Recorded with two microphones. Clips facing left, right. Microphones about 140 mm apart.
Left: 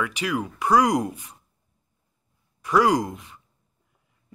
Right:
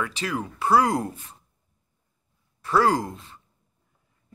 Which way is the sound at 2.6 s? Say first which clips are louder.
Left 1 dB; 15° left (ahead or behind).